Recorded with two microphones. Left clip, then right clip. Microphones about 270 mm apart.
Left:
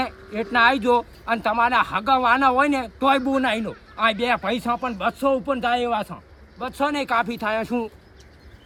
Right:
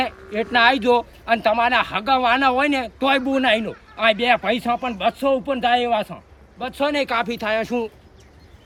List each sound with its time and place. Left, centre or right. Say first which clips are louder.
0.0 s speech: right 3 dB; centre